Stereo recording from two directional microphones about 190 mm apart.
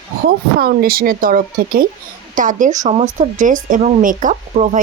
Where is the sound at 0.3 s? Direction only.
50° right (ahead or behind).